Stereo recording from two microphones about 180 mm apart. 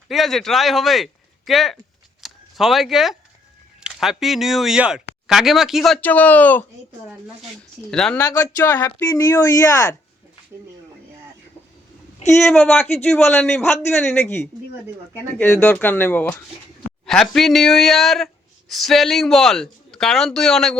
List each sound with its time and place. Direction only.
0.1 s speech: centre (ahead or behind)
2.2 s a sound: centre (ahead or behind)
3.8 s speech: 5° right (ahead or behind)
7.9 s speech: 5° left (ahead or behind)
8.2 s speech: 20° left (ahead or behind)
12.5 s speech: centre (ahead or behind)
15.4 s speech: 15° left (ahead or behind)